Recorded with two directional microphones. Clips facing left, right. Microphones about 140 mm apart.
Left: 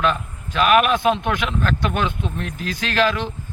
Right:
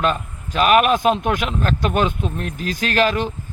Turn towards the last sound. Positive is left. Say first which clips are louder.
# right 1 dB
turn(degrees=-45)  # may be behind; listen again after turning